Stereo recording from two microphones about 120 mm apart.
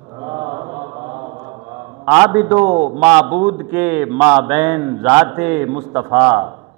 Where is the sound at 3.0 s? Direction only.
15° right (ahead or behind).